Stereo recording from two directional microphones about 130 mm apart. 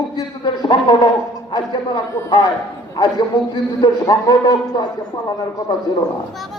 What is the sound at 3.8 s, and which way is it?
A man's voice, 30° left (ahead or behind).